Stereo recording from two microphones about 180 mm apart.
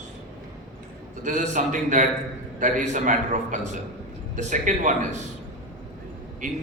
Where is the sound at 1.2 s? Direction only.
45° right (ahead or behind).